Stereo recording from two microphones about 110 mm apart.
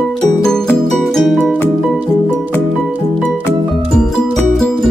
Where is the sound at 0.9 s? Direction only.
Centre (ahead or behind).